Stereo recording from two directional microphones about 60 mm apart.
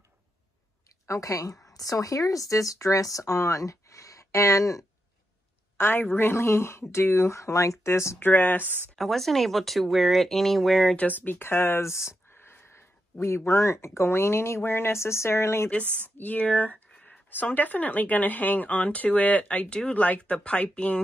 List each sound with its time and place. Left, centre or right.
1.0 s a woman's voice: left
1.7 s speech: left
5.8 s speech: left
8.2 s speech: left
8.6 s speech: right
8.9 s speech: centre
11.0 s speech: left
15.7 s speech: left
16.9 s a sound: left
17.3 s speech: left